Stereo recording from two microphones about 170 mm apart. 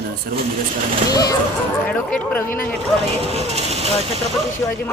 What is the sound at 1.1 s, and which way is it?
Speech, 20° left (ahead or behind).